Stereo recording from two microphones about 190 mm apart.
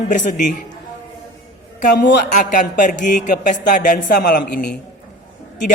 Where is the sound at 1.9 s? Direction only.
60° left (ahead or behind).